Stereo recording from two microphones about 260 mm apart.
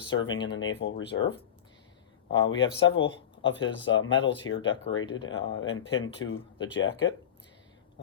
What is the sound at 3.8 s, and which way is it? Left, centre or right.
Speech, left.